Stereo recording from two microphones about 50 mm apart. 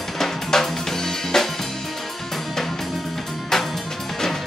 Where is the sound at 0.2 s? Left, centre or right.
Centre.